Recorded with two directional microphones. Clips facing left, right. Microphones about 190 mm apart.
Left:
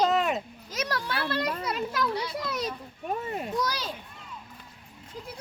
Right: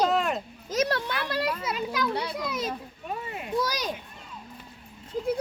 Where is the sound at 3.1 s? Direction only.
40° left (ahead or behind).